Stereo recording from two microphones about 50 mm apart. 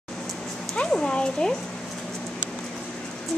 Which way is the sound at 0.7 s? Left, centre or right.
Centre.